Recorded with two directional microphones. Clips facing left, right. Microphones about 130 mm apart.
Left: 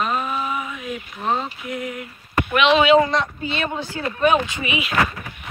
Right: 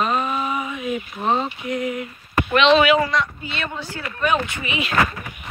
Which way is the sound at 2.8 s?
25° left (ahead or behind).